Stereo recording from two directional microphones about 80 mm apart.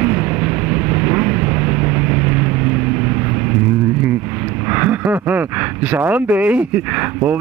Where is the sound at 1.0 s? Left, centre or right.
Right.